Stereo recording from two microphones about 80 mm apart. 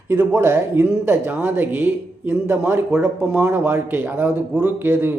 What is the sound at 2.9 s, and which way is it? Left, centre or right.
Speech, centre.